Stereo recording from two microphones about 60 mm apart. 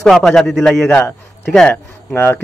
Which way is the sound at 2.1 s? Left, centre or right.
Left.